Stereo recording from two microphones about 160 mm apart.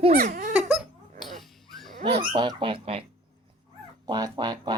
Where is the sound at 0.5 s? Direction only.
10° right (ahead or behind).